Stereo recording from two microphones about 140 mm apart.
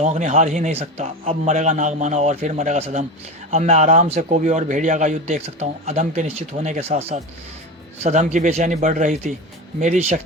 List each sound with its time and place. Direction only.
0.0 s a man's voice: 60° right (ahead or behind)
0.8 s a man's voice: 45° right (ahead or behind)
1.5 s a man's voice: 60° right (ahead or behind)